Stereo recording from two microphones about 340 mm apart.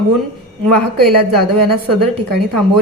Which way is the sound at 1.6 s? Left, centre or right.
Right.